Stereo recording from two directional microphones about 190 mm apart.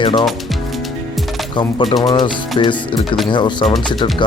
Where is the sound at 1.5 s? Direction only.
25° left (ahead or behind).